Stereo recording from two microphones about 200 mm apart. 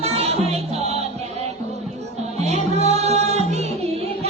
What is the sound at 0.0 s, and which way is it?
Music, 30° right (ahead or behind).